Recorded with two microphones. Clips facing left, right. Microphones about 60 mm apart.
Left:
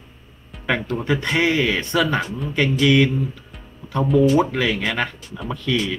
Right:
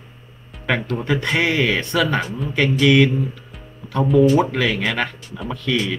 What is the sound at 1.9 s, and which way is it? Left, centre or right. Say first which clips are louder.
Speech: left 1 dB; centre.